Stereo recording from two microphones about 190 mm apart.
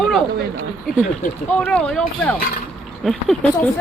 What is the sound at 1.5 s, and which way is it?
Speech, 5° left (ahead or behind).